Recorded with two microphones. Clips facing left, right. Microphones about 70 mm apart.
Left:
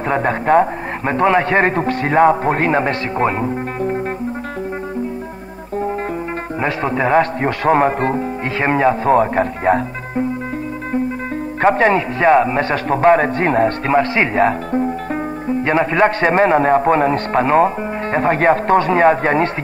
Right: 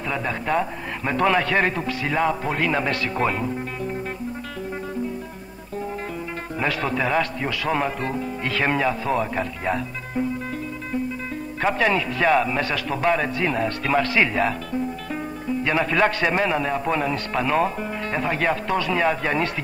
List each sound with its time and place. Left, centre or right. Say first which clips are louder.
0.1 s a man's voice: left 10 dB; left
6.6 s a man's voice: left 5 dB; left
11.6 s a man's voice: left 8 dB; left